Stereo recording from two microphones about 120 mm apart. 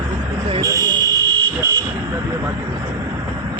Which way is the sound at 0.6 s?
30° right (ahead or behind).